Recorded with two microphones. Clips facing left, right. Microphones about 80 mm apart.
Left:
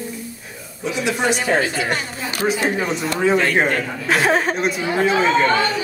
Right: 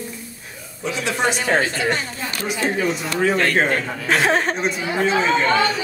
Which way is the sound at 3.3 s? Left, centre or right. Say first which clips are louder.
Left 1 dB; centre.